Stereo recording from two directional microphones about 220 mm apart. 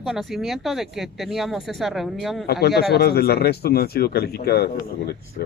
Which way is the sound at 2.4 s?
45° left (ahead or behind).